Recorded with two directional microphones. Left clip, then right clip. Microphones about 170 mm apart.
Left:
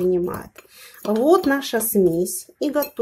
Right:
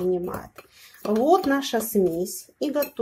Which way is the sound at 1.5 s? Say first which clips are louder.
Left 3 dB; 25° left (ahead or behind).